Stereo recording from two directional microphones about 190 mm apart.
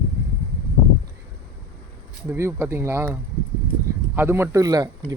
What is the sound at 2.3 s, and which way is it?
Speech, 15° right (ahead or behind).